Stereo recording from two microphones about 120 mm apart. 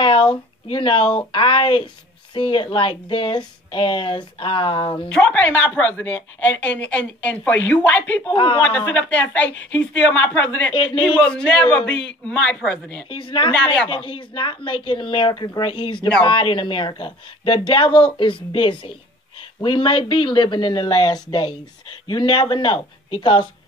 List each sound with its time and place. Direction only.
0.0 s speech: 45° left (ahead or behind)
5.1 s a woman's voice: 10° left (ahead or behind)
8.3 s speech: 45° left (ahead or behind)
8.9 s a woman's voice: 15° left (ahead or behind)
10.7 s speech: 45° left (ahead or behind)
11.1 s a woman's voice: 5° left (ahead or behind)
13.1 s speech: 45° left (ahead or behind)